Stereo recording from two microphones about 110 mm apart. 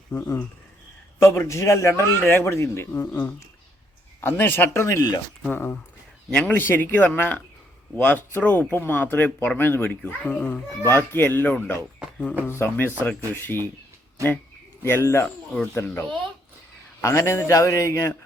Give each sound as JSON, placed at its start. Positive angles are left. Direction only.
{"t": 1.2, "sound": "a man's voice", "side_deg": 25}
{"t": 5.4, "sound": "a man's voice", "side_deg": 15}
{"t": 14.2, "sound": "speech", "side_deg": -30}
{"t": 14.8, "sound": "a man's voice", "side_deg": 20}